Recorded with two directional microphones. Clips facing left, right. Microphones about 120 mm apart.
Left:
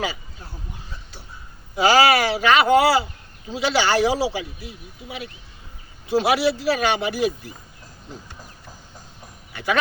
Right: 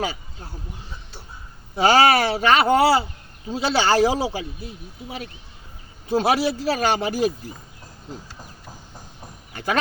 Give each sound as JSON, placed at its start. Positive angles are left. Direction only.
{"t": 1.7, "sound": "a man's voice", "side_deg": -35}
{"t": 6.2, "sound": "speech", "side_deg": -40}
{"t": 9.5, "sound": "speech", "side_deg": -45}